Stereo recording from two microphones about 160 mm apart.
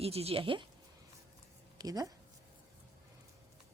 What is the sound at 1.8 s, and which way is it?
Speech, 25° right (ahead or behind).